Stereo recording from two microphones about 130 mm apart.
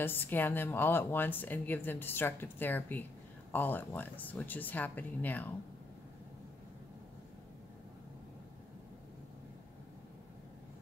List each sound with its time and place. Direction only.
0.0 s speech: 15° left (ahead or behind)